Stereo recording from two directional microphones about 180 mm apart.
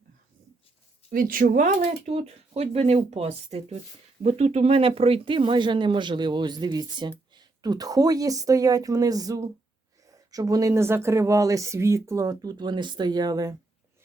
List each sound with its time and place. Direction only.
1.1 s speech: 50° right (ahead or behind)
1.9 s speech: 35° right (ahead or behind)